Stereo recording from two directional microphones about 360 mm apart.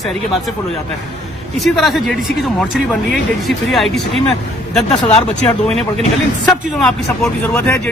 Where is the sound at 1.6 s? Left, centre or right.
Centre.